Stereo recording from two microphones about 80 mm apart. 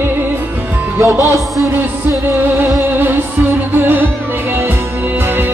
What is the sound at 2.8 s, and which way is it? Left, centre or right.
Music, right.